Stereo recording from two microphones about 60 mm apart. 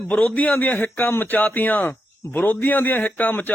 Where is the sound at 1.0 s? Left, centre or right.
Left.